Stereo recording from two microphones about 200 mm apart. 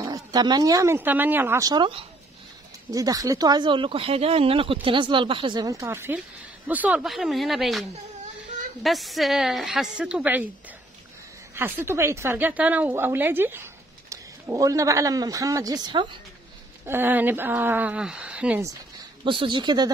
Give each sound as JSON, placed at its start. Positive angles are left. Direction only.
{"t": 0.0, "sound": "a woman's voice", "side_deg": -20}
{"t": 8.8, "sound": "a woman's voice", "side_deg": 0}
{"t": 11.5, "sound": "speech", "side_deg": -10}
{"t": 16.8, "sound": "speech", "side_deg": -10}
{"t": 19.2, "sound": "speech", "side_deg": -25}